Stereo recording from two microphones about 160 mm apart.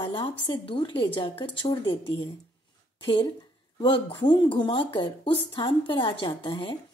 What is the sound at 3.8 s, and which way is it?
Speech, 30° left (ahead or behind).